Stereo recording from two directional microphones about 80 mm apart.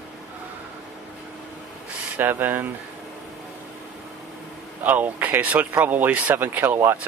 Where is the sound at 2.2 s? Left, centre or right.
Right.